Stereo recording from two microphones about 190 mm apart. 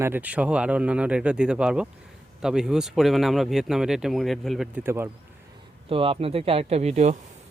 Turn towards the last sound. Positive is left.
turn(degrees=-35)  # may be behind; listen again after turning